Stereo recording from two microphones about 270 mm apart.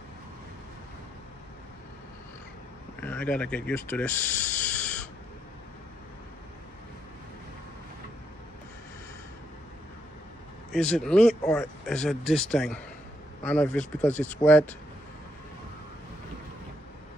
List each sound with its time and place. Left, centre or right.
3.0 s speech: centre
10.7 s speech: centre